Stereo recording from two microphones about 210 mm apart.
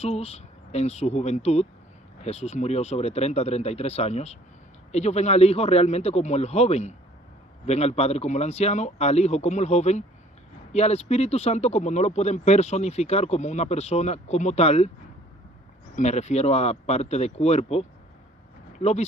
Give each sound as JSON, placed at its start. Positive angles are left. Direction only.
{"t": 0.0, "sound": "speech", "side_deg": 30}
{"t": 16.0, "sound": "speech", "side_deg": 30}